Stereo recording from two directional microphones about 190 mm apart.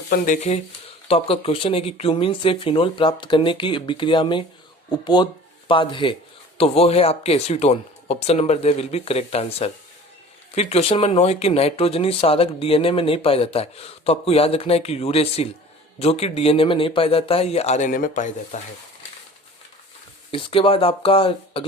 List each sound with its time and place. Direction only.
0.3 s speech: 35° left (ahead or behind)
20.3 s speech: 30° left (ahead or behind)